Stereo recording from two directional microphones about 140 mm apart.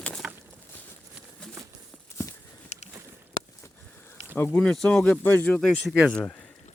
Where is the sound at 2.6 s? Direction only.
55° left (ahead or behind).